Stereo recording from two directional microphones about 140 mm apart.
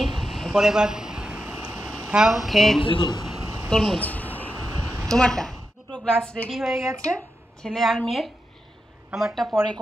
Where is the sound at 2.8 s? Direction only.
35° left (ahead or behind).